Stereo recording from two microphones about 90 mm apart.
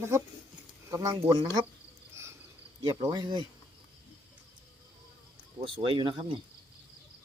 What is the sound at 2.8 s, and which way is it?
Speech, 40° right (ahead or behind).